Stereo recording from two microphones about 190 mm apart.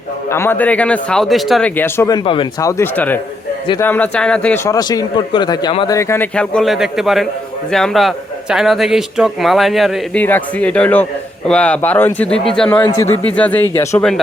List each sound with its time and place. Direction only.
0.3 s a man's voice: 10° left (ahead or behind)
12.8 s a man's voice: 15° left (ahead or behind)